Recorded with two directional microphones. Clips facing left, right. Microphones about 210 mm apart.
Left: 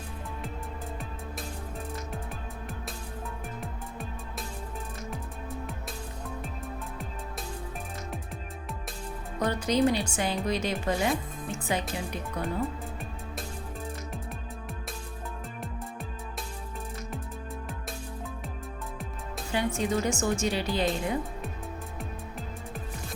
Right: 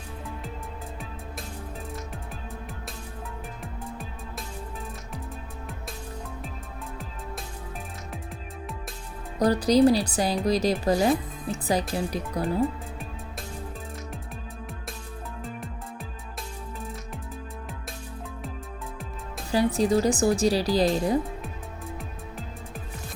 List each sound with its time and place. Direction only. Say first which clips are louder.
9.4 s speech: right 6 dB; 35° right (ahead or behind)
19.5 s speech: right 6 dB; 35° right (ahead or behind)
21.9 s music: even; centre (ahead or behind)